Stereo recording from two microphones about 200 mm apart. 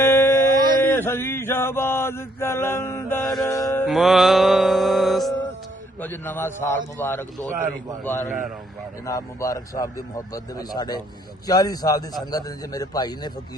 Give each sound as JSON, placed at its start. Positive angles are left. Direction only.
{"t": 0.0, "sound": "a sound", "side_deg": 15}
{"t": 0.9, "sound": "mantra", "side_deg": 10}
{"t": 3.8, "sound": "music", "side_deg": 0}
{"t": 6.0, "sound": "mantra", "side_deg": 10}
{"t": 11.4, "sound": "speech", "side_deg": 20}